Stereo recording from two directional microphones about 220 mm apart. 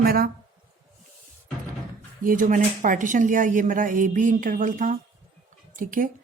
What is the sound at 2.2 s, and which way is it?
Speech, 35° right (ahead or behind).